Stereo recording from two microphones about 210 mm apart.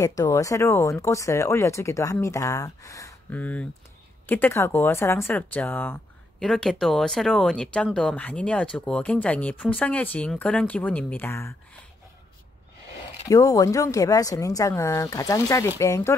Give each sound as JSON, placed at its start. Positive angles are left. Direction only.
{"t": 0.0, "sound": "speech", "side_deg": 15}
{"t": 13.3, "sound": "speech", "side_deg": 15}